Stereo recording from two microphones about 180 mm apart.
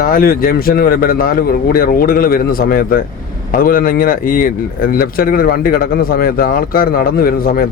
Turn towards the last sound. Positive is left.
turn(degrees=55)  # may be behind; listen again after turning